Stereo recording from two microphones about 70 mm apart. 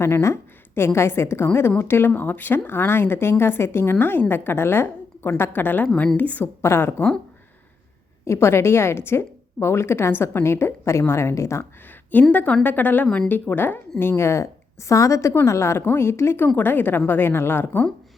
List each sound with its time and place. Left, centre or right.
0.0 s a woman's voice: left
6.6 s speech: left
8.2 s speech: left
12.3 s a woman's voice: left